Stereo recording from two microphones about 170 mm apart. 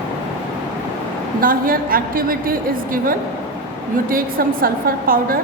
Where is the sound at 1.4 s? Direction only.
55° right (ahead or behind).